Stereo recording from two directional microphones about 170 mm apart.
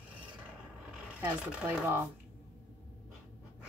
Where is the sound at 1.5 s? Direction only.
5° right (ahead or behind).